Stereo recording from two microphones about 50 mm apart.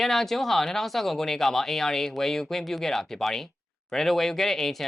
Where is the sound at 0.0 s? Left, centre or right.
Centre.